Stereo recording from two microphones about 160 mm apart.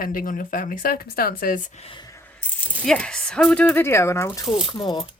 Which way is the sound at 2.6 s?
5° left (ahead or behind).